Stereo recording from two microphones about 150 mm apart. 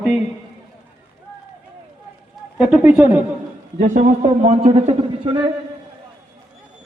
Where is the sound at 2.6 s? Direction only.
10° right (ahead or behind).